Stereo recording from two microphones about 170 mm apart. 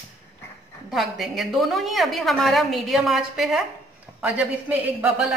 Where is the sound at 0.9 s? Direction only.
Centre (ahead or behind).